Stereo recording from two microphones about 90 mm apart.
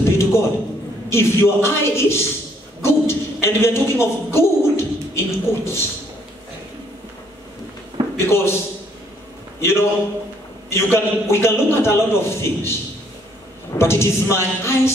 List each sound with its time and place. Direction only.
0.0 s a sound: 30° left (ahead or behind)
1.1 s a man's voice: 30° left (ahead or behind)
2.8 s a sound: 30° left (ahead or behind)
8.2 s a man's voice: 25° left (ahead or behind)
9.6 s a man's voice: 30° left (ahead or behind)
13.7 s a man's voice: 30° left (ahead or behind)